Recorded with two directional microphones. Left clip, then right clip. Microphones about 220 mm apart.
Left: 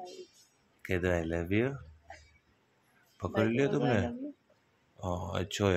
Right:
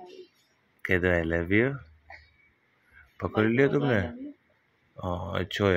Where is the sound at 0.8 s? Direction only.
10° right (ahead or behind).